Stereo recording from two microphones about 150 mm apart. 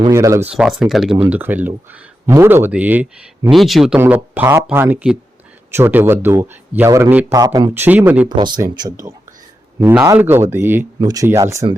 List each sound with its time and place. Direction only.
0.1 s speech: 20° right (ahead or behind)
0.5 s speech: 5° right (ahead or behind)
1.1 s speech: 10° right (ahead or behind)
3.5 s speech: centre (ahead or behind)
3.9 s speech: 10° right (ahead or behind)
7.3 s speech: 25° right (ahead or behind)
7.7 s speech: 10° right (ahead or behind)
8.4 s speech: 30° right (ahead or behind)
9.8 s speech: 10° right (ahead or behind)